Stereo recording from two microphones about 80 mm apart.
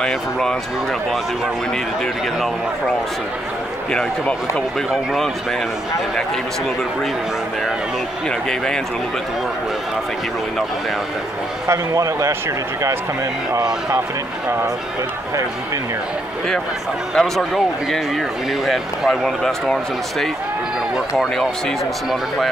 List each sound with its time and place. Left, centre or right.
0.0 s speech: centre
3.9 s speech: centre
11.6 s a man's voice: right
17.1 s speech: centre
18.7 s speech: centre